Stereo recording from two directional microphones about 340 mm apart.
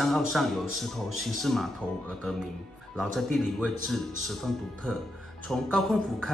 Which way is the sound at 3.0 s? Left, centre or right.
Centre.